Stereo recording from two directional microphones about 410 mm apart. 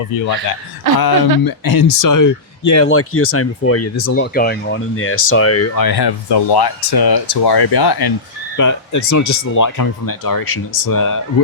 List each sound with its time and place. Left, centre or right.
0.9 s speech: left
2.8 s speech: left
4.4 s speech: left
5.7 s speech: left
8.5 s speech: left